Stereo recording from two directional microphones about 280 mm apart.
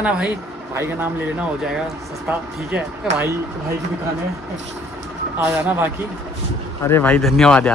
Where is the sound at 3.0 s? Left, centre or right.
Centre.